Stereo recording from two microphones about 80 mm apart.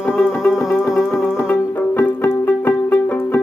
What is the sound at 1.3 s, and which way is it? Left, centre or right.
Music, left.